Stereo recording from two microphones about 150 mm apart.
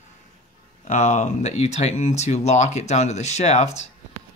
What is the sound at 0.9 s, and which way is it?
Speech, 50° left (ahead or behind).